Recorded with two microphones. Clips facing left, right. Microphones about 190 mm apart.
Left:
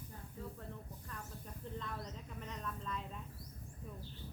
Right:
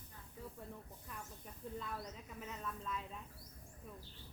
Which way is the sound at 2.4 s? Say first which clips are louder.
Even; 5° right (ahead or behind).